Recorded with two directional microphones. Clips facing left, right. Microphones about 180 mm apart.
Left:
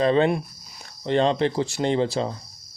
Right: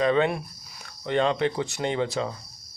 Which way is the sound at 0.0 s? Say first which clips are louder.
Left 3 dB; 30° left (ahead or behind).